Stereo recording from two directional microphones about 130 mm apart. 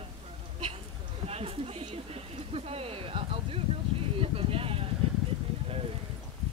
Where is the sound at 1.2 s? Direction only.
50° right (ahead or behind).